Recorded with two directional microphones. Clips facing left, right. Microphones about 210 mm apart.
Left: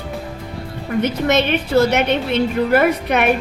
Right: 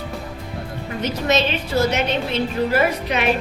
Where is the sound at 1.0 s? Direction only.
60° left (ahead or behind).